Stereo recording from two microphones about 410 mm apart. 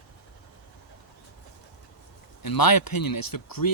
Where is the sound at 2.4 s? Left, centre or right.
Left.